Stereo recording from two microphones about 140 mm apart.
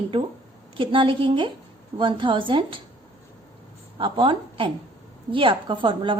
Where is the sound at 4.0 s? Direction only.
35° right (ahead or behind).